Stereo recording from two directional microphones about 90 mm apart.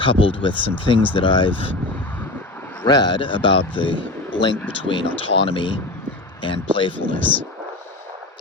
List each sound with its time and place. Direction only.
0.0 s speech: 75° left (ahead or behind)
2.8 s speech: 50° left (ahead or behind); by 3.9 s 70° left (ahead or behind)
4.3 s a sound: 65° left (ahead or behind)
4.9 s speech: 80° left; by 6.9 s 65° left (ahead or behind)
6.9 s speech: 20° left (ahead or behind)